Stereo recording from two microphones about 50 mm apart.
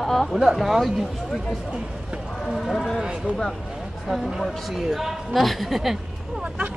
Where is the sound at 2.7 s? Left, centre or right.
Centre.